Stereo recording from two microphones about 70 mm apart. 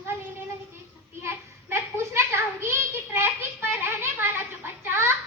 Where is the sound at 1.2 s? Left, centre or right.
Right.